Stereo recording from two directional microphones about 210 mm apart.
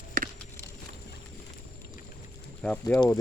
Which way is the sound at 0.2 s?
40° right (ahead or behind).